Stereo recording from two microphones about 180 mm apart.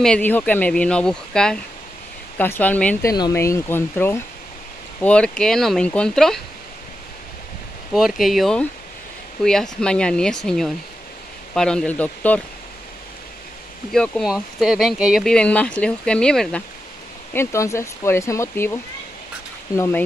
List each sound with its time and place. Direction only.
0.0 s speech: 5° left (ahead or behind)
3.1 s speech: 20° left (ahead or behind); by 6.4 s centre (ahead or behind)
7.9 s speech: centre (ahead or behind)
13.9 s speech: 5° left (ahead or behind)